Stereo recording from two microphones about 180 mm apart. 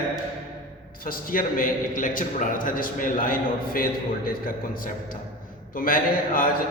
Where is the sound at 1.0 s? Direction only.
55° left (ahead or behind).